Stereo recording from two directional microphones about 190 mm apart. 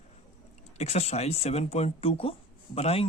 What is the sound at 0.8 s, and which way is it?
Speech, 35° left (ahead or behind).